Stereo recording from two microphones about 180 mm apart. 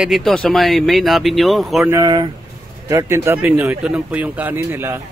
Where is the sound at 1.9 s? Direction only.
20° right (ahead or behind).